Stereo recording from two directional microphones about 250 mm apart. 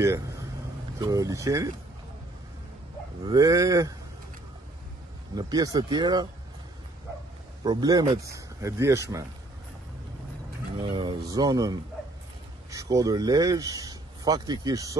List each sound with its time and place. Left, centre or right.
0.9 s speech: centre
3.3 s speech: centre
5.3 s speech: centre
7.6 s speech: centre
10.8 s speech: centre